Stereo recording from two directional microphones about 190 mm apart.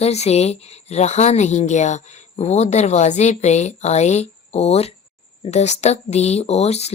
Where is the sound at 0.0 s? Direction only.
35° left (ahead or behind).